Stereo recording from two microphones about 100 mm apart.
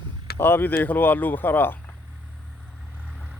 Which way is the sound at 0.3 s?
20° left (ahead or behind).